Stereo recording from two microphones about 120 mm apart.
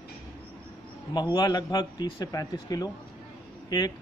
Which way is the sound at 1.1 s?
35° left (ahead or behind).